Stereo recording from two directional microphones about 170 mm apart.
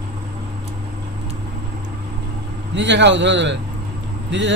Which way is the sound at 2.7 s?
90° right.